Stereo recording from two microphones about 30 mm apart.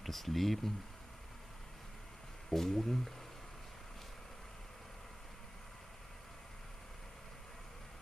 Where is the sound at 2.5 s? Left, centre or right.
Centre.